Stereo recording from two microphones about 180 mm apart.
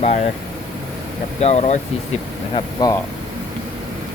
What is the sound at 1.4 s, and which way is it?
Speech, 40° left (ahead or behind).